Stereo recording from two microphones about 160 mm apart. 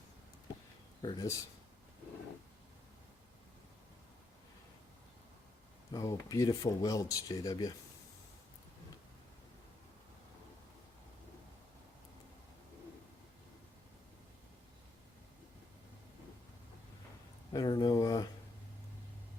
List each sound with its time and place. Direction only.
1.0 s speech: 25° left (ahead or behind)
5.9 s speech: 25° left (ahead or behind)
17.5 s a sound: 25° left (ahead or behind)